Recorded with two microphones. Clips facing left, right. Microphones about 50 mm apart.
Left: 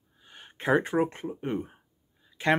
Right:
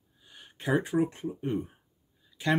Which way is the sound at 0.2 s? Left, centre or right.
Left.